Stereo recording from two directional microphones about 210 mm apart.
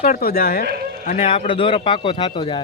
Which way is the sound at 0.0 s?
40° left (ahead or behind).